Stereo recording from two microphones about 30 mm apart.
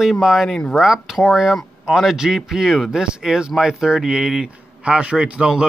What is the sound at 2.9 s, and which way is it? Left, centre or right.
Speech, right.